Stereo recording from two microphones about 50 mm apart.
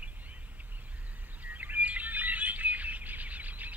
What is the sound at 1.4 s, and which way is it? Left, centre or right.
Bird, right.